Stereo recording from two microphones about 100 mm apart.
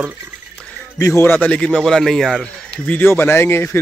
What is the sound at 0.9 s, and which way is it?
Speech, 35° left (ahead or behind).